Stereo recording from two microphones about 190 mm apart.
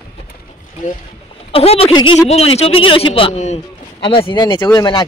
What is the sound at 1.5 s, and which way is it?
Speech, 30° left (ahead or behind).